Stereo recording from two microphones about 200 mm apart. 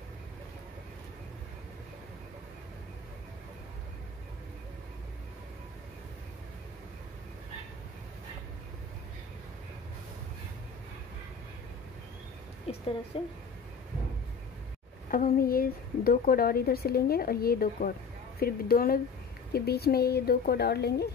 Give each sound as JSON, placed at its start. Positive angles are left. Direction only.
{"t": 12.7, "sound": "a sound", "side_deg": 30}
{"t": 13.1, "sound": "a woman's voice", "side_deg": 25}
{"t": 15.0, "sound": "a woman's voice", "side_deg": 45}